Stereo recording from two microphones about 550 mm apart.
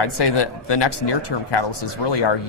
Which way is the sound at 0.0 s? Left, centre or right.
Left.